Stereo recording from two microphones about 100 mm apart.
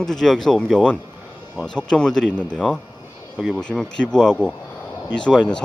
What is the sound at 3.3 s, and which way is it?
Speech, 10° right (ahead or behind).